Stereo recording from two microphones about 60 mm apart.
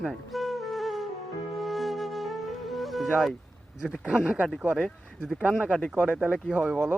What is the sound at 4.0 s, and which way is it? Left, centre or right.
Speech, centre.